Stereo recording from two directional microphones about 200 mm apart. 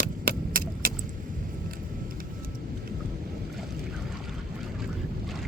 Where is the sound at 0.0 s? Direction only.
45° right (ahead or behind).